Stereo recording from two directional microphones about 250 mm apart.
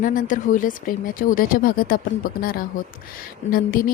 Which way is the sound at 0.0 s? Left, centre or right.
Left.